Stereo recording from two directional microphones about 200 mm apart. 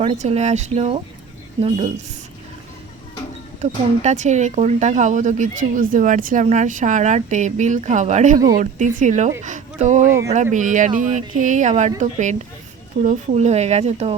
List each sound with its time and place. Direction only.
0.0 s speech: 30° right (ahead or behind)
3.6 s speech: 35° right (ahead or behind)
10.1 s speech: 15° right (ahead or behind)
10.3 s speech: 40° right (ahead or behind)